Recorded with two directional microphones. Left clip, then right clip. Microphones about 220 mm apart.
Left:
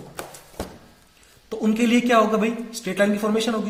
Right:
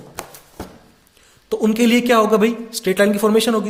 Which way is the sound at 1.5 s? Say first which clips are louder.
Right 5 dB; 40° right (ahead or behind).